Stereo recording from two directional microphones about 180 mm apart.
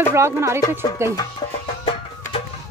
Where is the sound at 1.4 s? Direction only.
20° left (ahead or behind).